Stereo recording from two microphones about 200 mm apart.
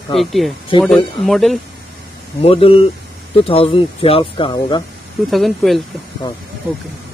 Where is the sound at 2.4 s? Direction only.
30° left (ahead or behind).